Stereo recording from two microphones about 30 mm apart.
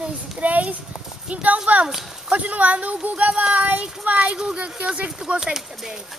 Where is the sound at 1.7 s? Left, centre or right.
Right.